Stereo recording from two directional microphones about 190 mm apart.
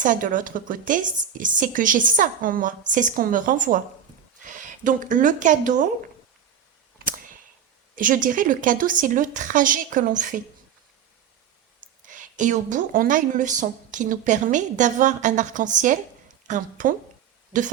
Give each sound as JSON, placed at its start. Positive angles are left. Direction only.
{"t": 0.0, "sound": "a woman's voice", "side_deg": -45}
{"t": 7.0, "sound": "a sound", "side_deg": -45}
{"t": 7.9, "sound": "a woman's voice", "side_deg": -45}
{"t": 11.8, "sound": "a woman's voice", "side_deg": -45}